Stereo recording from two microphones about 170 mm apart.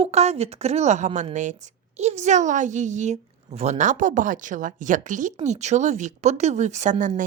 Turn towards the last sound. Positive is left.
turn(degrees=-45)  # may be behind; listen again after turning